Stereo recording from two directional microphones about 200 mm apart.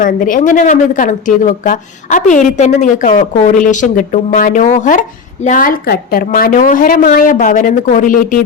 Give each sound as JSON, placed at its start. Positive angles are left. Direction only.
{"t": 0.0, "sound": "a woman's voice", "side_deg": 40}